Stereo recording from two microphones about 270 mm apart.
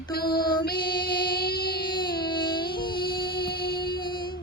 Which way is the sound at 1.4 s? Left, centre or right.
Left.